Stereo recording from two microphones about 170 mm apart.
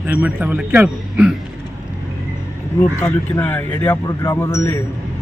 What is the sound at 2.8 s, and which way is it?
Speech, 15° left (ahead or behind).